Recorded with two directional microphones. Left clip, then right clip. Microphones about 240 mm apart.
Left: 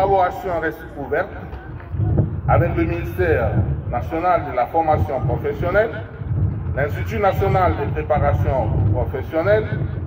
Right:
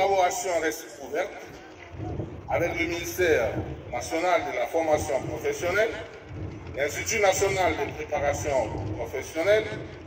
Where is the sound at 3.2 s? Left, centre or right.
Right.